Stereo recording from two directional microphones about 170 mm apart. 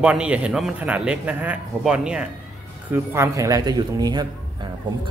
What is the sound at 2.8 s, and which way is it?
Speech, 15° right (ahead or behind).